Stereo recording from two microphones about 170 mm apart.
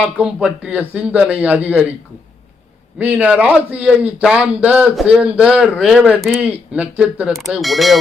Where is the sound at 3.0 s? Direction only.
10° right (ahead or behind).